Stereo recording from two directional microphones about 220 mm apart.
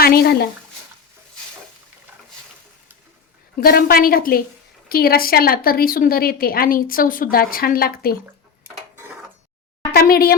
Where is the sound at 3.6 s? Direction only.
40° left (ahead or behind).